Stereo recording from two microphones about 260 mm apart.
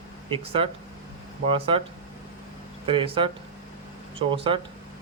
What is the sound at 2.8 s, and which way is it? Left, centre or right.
Speech, centre.